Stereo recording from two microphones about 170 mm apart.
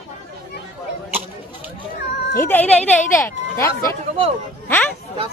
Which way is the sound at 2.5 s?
10° left (ahead or behind).